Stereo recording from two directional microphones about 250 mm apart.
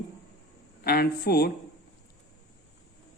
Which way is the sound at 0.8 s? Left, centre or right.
Left.